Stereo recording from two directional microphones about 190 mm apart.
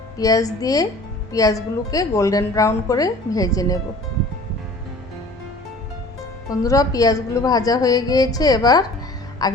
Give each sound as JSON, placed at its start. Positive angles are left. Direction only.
{"t": 0.2, "sound": "a woman's voice", "side_deg": 20}
{"t": 6.5, "sound": "a woman's voice", "side_deg": 20}